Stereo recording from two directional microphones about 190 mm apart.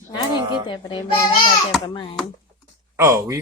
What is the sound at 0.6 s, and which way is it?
A child's voice, 25° left (ahead or behind).